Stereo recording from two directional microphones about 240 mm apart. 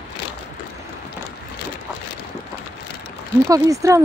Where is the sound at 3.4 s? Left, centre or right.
Centre.